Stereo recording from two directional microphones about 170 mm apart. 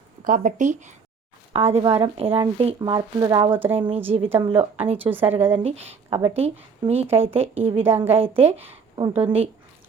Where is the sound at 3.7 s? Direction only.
35° right (ahead or behind).